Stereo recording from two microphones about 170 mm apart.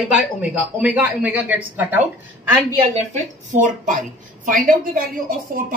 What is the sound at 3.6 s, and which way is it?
A woman's voice, 50° right (ahead or behind).